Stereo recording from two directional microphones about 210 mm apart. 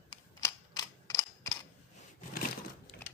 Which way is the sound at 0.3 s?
15° left (ahead or behind).